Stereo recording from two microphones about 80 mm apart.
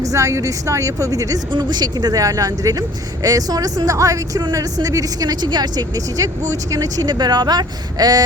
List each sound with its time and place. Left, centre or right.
0.0 s speech: right
1.5 s speech: right
6.1 s speech: right